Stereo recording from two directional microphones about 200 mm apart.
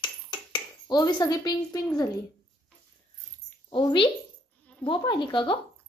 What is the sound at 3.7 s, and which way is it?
A woman's voice, 25° left (ahead or behind).